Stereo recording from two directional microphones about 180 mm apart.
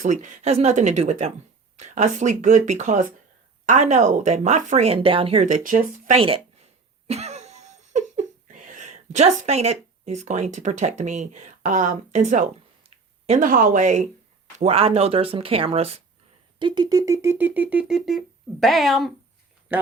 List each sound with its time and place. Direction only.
0.0 s speech: 45° right (ahead or behind)
6.1 s speech: 30° right (ahead or behind)
7.1 s a sound: 35° right (ahead or behind)
13.2 s speech: 45° right (ahead or behind)
16.6 s speech: 25° right (ahead or behind)